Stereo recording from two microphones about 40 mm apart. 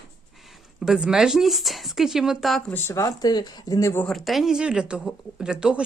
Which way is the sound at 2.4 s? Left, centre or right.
Centre.